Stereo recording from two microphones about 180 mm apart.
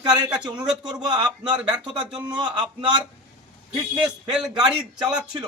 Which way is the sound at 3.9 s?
5° right (ahead or behind).